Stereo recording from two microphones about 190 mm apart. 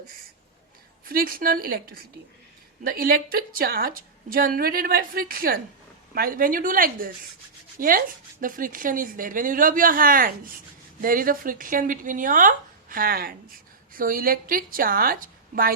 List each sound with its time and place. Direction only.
1.0 s speech: 50° right (ahead or behind)